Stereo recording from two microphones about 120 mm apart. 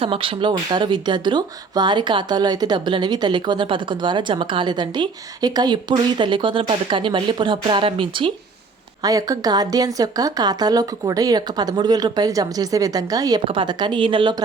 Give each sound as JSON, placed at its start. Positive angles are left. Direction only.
{"t": 0.0, "sound": "speech", "side_deg": -50}
{"t": 9.0, "sound": "speech", "side_deg": -30}
{"t": 13.5, "sound": "speech", "side_deg": -40}